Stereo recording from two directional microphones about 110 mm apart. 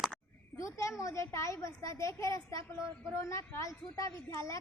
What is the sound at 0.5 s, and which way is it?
A child's voice, 30° left (ahead or behind).